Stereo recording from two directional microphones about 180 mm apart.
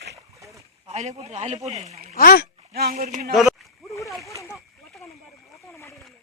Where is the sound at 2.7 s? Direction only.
60° right (ahead or behind).